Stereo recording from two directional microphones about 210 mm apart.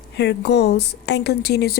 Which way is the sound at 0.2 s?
50° left (ahead or behind).